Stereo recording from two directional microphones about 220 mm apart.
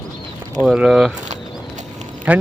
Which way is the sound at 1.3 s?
30° right (ahead or behind).